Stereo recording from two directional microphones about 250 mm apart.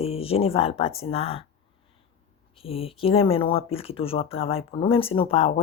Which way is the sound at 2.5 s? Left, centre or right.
Left.